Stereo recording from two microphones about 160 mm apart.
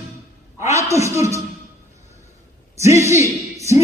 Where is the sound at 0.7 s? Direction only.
20° right (ahead or behind).